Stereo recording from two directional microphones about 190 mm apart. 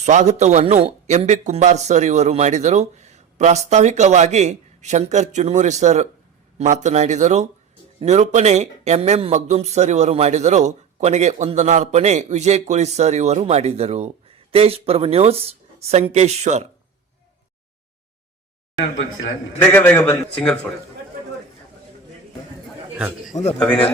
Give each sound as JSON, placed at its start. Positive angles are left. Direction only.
{"t": 0.0, "sound": "speech", "side_deg": -40}
{"t": 19.5, "sound": "a man's voice", "side_deg": 10}
{"t": 23.0, "sound": "a man's voice", "side_deg": -5}